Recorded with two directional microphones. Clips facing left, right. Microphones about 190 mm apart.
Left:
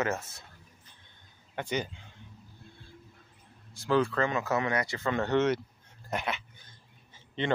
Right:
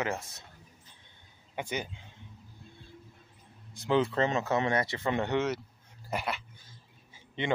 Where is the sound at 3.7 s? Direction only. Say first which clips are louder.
Even; 20° right (ahead or behind).